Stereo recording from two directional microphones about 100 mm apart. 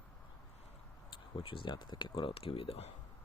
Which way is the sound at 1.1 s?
60° left (ahead or behind).